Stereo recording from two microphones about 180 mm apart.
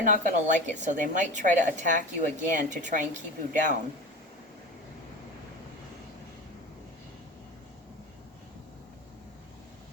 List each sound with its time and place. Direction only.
0.0 s a woman's voice: 45° right (ahead or behind)